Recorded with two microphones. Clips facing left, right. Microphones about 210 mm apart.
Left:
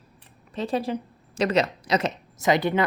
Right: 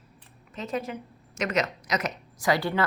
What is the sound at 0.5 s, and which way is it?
A woman's voice, 30° left (ahead or behind).